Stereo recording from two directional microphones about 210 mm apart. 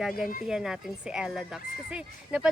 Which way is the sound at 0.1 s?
40° left (ahead or behind).